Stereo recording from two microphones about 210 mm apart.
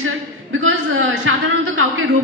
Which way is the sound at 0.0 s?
70° right (ahead or behind).